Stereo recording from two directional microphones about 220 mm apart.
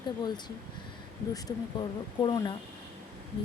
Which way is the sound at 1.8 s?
20° left (ahead or behind).